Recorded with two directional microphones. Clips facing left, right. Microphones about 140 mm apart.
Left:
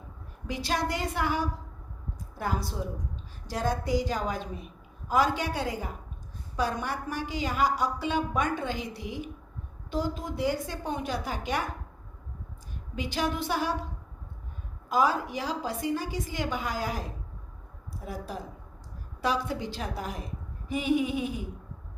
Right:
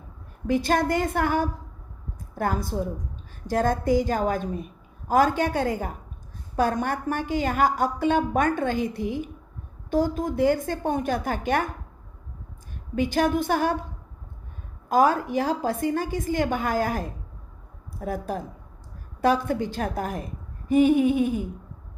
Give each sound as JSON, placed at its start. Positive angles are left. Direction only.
{"t": 0.4, "sound": "a woman's voice", "side_deg": -50}
{"t": 13.0, "sound": "a woman's voice", "side_deg": -50}
{"t": 14.8, "sound": "a woman's voice", "side_deg": -50}